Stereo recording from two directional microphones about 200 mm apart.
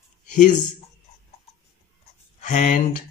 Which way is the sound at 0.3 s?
40° left (ahead or behind).